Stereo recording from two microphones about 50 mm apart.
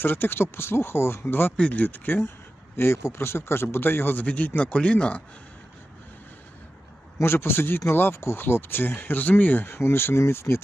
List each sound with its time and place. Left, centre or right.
0.0 s speech: left
1.5 s speech: left
2.7 s speech: left
7.2 s speech: left